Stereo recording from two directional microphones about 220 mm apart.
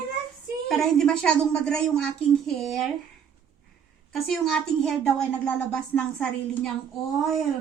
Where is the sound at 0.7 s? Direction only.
Centre (ahead or behind).